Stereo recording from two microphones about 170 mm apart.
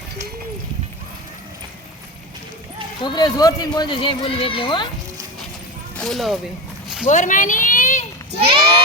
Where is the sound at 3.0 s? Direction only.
25° left (ahead or behind).